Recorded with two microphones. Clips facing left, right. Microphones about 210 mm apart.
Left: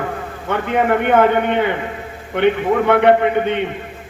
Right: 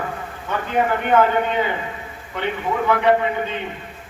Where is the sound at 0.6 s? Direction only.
65° left (ahead or behind).